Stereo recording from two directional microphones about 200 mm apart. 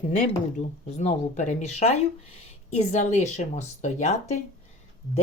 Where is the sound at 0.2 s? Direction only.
35° left (ahead or behind).